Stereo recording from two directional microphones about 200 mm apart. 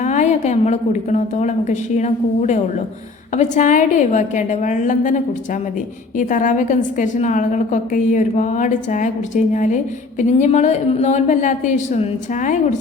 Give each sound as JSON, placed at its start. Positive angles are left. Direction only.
{"t": 0.0, "sound": "a woman's voice", "side_deg": 35}